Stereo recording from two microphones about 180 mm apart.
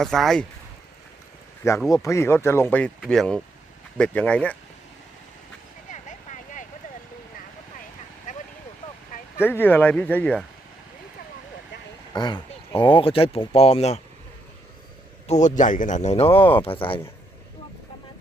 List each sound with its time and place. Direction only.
0.0 s speech: centre (ahead or behind)
1.9 s speech: 15° left (ahead or behind)
5.9 s vehicle: 45° left (ahead or behind)
8.3 s vehicle: 45° left (ahead or behind)
9.4 s speech: 10° left (ahead or behind)
12.1 s speech: 25° left (ahead or behind)
15.3 s speech: 40° left (ahead or behind)